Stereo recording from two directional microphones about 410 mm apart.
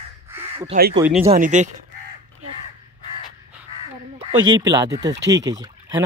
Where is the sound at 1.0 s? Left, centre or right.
Centre.